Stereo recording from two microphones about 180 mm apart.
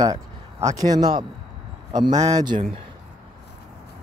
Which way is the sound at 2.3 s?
20° right (ahead or behind).